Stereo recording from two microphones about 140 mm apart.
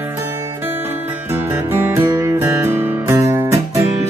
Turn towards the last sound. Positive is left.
turn(degrees=-20)  # may be behind; listen again after turning